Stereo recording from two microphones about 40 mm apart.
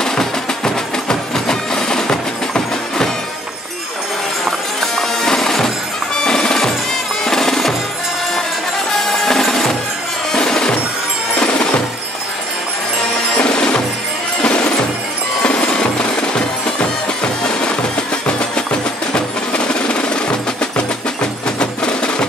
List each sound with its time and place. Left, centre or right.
0.0 s music: centre
1.0 s a sound: centre
4.5 s music: centre
8.9 s music: centre
11.3 s music: left
13.4 s music: left
15.7 s music: left
19.1 s music: left